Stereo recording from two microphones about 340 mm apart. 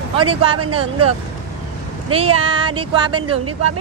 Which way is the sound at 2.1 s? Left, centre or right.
Centre.